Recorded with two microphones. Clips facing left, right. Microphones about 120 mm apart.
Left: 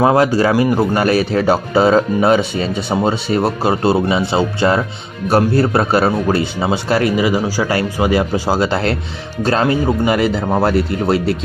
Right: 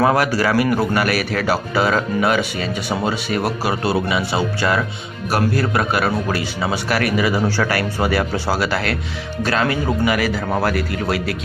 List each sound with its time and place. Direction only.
0.0 s speech: 25° left (ahead or behind)